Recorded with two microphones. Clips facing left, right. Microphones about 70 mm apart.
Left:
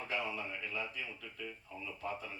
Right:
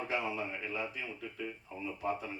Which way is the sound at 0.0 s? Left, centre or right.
Centre.